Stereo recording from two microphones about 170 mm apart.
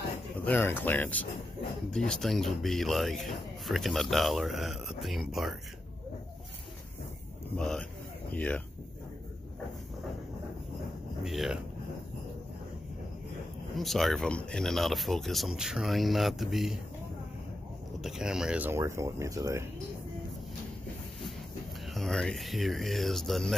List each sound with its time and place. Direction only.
0.5 s speech: 10° left (ahead or behind)
7.5 s speech: 5° left (ahead or behind)
11.2 s speech: centre (ahead or behind)
13.7 s speech: centre (ahead or behind)
18.0 s speech: 5° right (ahead or behind); by 19.6 s 20° right (ahead or behind)
21.9 s speech: 5° left (ahead or behind)